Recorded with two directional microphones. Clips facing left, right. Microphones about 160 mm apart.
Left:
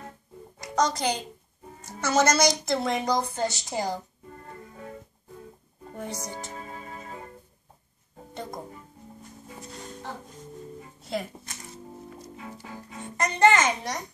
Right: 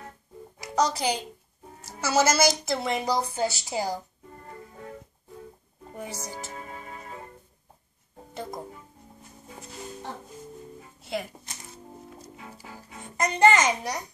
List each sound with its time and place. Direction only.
0.6 s a child's voice: 5° right (ahead or behind)
5.9 s speech: 5° right (ahead or behind)
8.4 s speech: 5° right (ahead or behind)
9.6 s music: 5° right (ahead or behind)
12.4 s a child's voice: 10° right (ahead or behind)